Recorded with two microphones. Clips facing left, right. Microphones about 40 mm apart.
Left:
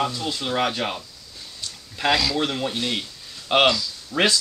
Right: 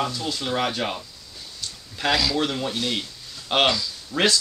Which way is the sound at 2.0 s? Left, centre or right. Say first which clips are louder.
Left 1 dB; centre.